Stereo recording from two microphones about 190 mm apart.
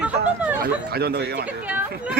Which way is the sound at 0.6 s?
55° right (ahead or behind).